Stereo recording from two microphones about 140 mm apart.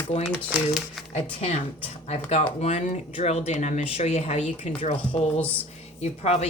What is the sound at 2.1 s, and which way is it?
Speech, 50° left (ahead or behind).